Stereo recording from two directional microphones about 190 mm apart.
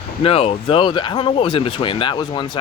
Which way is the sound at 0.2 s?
30° left (ahead or behind).